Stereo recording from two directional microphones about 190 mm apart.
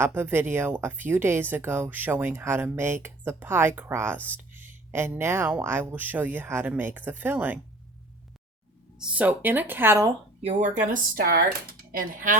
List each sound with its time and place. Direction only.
0.0 s speech: 10° right (ahead or behind)
9.0 s speech: 5° right (ahead or behind)
10.4 s speech: 40° right (ahead or behind)